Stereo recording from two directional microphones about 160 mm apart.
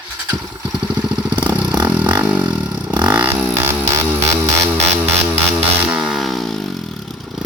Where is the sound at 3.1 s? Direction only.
10° right (ahead or behind).